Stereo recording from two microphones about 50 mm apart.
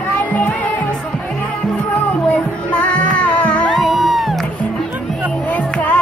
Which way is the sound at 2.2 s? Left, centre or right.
Left.